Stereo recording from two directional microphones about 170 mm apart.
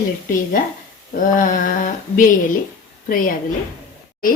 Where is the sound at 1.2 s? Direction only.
50° left (ahead or behind).